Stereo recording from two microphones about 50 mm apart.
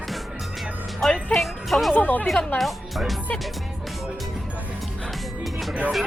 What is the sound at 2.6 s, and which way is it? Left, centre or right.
Speech, centre.